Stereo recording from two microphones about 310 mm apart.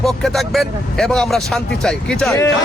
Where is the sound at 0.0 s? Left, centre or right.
Centre.